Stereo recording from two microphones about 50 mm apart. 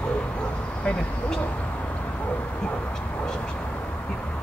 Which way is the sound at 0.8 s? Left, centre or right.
Left.